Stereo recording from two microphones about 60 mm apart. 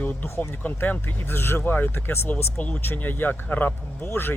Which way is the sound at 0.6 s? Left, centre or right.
Left.